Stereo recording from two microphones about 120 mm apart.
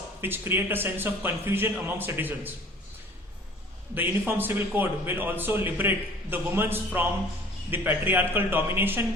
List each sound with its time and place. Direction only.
0.2 s a man's voice: 15° right (ahead or behind)
3.9 s a man's voice: 15° right (ahead or behind)